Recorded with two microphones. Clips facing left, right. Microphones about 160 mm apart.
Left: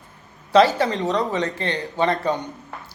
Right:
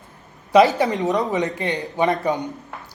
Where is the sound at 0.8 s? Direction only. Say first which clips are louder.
Right 1 dB; 20° right (ahead or behind).